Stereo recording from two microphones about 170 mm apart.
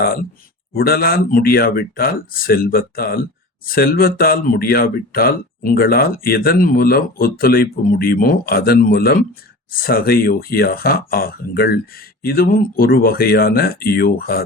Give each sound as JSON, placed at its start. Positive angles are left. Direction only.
{"t": 0.7, "sound": "speech", "side_deg": 60}